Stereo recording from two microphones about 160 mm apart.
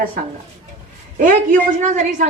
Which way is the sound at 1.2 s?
60° right (ahead or behind).